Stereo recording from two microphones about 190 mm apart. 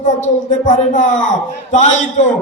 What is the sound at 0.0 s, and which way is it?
Speech, 40° left (ahead or behind).